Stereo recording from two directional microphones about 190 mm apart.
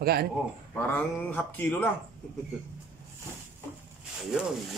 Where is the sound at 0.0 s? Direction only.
55° right (ahead or behind).